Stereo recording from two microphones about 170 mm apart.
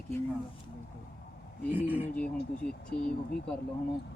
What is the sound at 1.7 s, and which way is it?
Speech, 10° right (ahead or behind).